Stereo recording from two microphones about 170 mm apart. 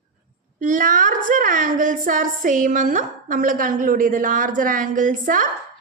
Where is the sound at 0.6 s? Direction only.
50° right (ahead or behind).